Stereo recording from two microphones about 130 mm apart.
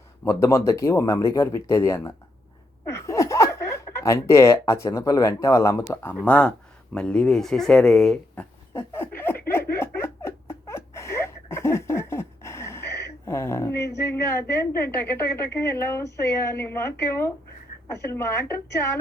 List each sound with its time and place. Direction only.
0.3 s speech: 20° left (ahead or behind)
2.8 s chuckle: 20° left (ahead or behind)
5.9 s speech: 15° left (ahead or behind)
8.4 s a sound: 20° left (ahead or behind)
17.8 s speech: 20° left (ahead or behind)